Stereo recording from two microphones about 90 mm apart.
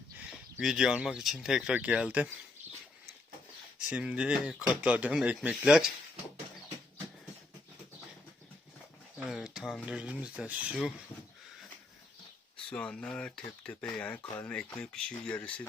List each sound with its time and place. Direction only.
0.2 s a sound: 15° right (ahead or behind)
0.6 s speech: 5° right (ahead or behind)
3.8 s speech: 10° right (ahead or behind)
9.1 s speech: 5° right (ahead or behind)
12.5 s speech: 10° left (ahead or behind)